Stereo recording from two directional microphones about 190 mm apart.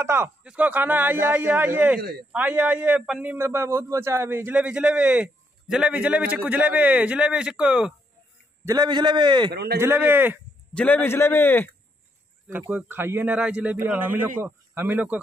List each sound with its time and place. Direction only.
0.0 s a man's voice: 15° right (ahead or behind)
8.6 s a man's voice: 20° right (ahead or behind)
9.5 s speech: 60° right (ahead or behind)
9.8 s a man's voice: 10° right (ahead or behind)
10.7 s a man's voice: 5° left (ahead or behind)
12.5 s a man's voice: 10° right (ahead or behind)